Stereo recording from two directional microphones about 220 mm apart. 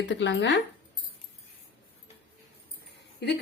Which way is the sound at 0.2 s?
55° left (ahead or behind).